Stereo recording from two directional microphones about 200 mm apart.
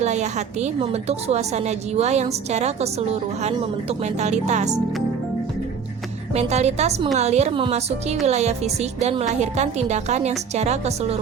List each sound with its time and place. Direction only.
0.0 s speech: 35° right (ahead or behind)
6.3 s speech: 35° right (ahead or behind)